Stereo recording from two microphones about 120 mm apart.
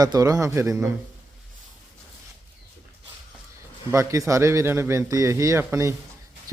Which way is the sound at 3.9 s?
25° right (ahead or behind).